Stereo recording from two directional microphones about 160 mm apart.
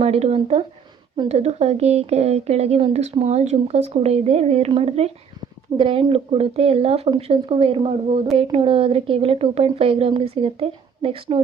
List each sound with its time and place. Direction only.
0.0 s a woman's voice: 40° right (ahead or behind)